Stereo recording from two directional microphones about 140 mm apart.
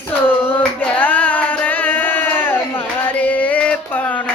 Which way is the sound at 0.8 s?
10° left (ahead or behind).